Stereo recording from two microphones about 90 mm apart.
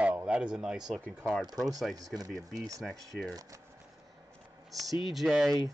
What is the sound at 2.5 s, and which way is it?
Speech, 40° right (ahead or behind).